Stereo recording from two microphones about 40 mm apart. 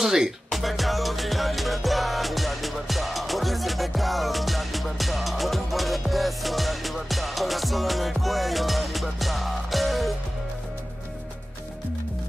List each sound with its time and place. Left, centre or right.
0.0 s speech: centre
0.5 s music: centre